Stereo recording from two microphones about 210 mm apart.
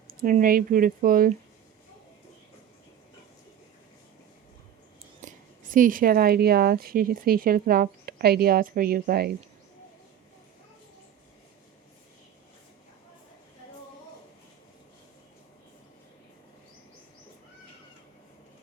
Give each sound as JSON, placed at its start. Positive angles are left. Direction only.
{"t": 0.1, "sound": "speech", "side_deg": -40}
{"t": 5.2, "sound": "speech", "side_deg": -40}